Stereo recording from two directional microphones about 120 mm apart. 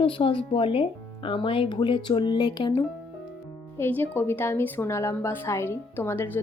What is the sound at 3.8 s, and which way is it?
A woman's voice, 15° left (ahead or behind).